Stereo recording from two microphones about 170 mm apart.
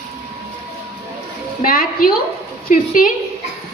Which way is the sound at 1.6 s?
55° left (ahead or behind).